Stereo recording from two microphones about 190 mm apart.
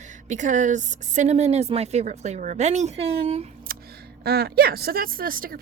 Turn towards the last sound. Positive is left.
turn(degrees=-50)  # may be behind; listen again after turning